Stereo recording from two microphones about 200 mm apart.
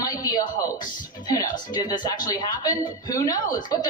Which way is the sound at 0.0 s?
20° left (ahead or behind).